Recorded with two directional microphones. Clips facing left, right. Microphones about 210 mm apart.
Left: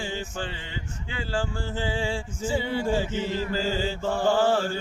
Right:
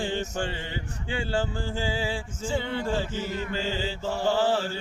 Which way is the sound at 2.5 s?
10° left (ahead or behind).